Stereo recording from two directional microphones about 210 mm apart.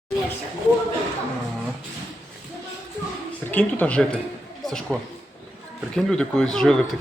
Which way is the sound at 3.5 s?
5° left (ahead or behind).